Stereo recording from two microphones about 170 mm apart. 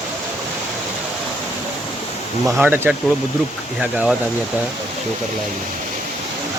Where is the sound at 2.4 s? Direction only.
Centre (ahead or behind).